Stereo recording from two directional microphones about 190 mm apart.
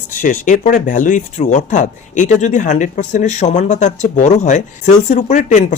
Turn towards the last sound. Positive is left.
turn(degrees=40)  # may be behind; listen again after turning